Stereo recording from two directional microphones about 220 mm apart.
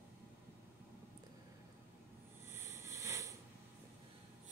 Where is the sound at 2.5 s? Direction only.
15° right (ahead or behind).